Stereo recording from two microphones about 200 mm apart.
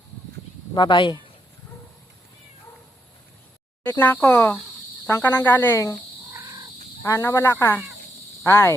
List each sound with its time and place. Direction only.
0.7 s speech: 20° left (ahead or behind)
3.8 s speech: 10° left (ahead or behind)
7.0 s speech: 15° left (ahead or behind)